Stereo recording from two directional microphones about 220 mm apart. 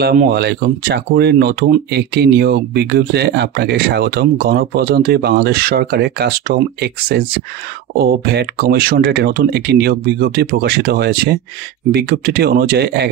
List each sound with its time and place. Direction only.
0.0 s speech: 40° right (ahead or behind)